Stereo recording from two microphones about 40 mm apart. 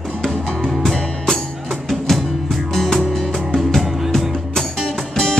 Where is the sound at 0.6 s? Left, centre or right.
Centre.